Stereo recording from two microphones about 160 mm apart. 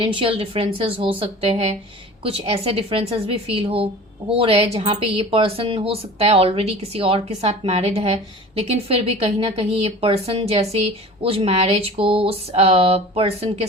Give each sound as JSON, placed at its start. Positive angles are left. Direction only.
{"t": 0.0, "sound": "speech", "side_deg": -30}